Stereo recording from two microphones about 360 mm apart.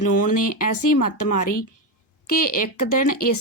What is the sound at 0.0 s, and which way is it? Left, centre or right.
A woman's voice, left.